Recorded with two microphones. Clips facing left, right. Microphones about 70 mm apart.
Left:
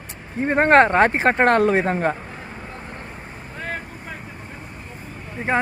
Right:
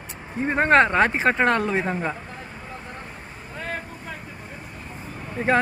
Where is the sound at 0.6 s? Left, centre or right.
Left.